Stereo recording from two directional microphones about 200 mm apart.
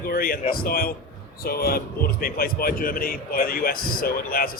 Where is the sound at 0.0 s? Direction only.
45° left (ahead or behind).